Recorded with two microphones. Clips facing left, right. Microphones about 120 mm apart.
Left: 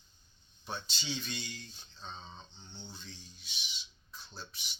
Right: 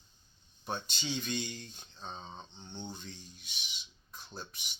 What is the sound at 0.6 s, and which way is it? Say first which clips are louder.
Speech: right 3 dB; 50° right (ahead or behind).